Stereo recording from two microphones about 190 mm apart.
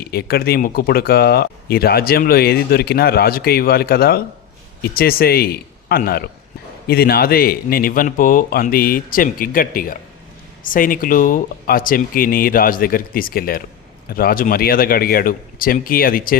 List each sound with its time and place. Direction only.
0.0 s speech: 55° left (ahead or behind)